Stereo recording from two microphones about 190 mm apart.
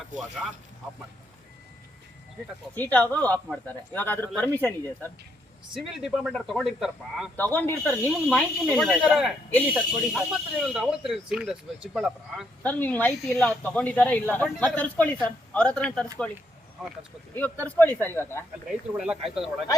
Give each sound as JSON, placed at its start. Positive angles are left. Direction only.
{"t": 0.1, "sound": "speech", "side_deg": -40}
{"t": 2.7, "sound": "speech", "side_deg": 10}
{"t": 5.7, "sound": "speech", "side_deg": 0}
{"t": 7.3, "sound": "speech", "side_deg": 10}
{"t": 17.3, "sound": "speech", "side_deg": 10}
{"t": 18.9, "sound": "speech", "side_deg": -5}